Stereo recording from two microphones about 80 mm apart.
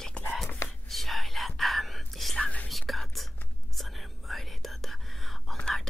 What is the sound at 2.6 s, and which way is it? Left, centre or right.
Whispering, centre.